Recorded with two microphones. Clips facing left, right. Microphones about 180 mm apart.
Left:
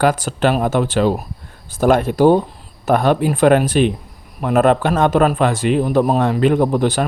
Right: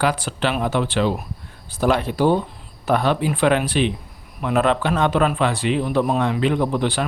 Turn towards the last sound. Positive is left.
turn(degrees=45)  # may be behind; listen again after turning